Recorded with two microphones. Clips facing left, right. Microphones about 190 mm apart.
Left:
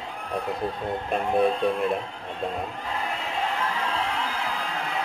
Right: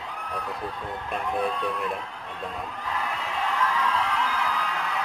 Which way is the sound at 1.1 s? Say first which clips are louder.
Left 5 dB; 30° left (ahead or behind).